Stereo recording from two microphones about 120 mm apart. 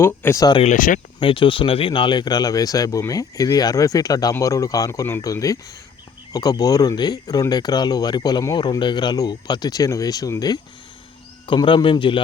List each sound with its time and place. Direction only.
0.0 s speech: 20° left (ahead or behind)
0.6 s speech: 90° left
1.2 s speech: 45° left (ahead or behind)
11.4 s a man's voice: 45° left (ahead or behind)